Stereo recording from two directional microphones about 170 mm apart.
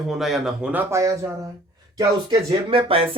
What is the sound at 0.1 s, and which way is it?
Speech, centre (ahead or behind).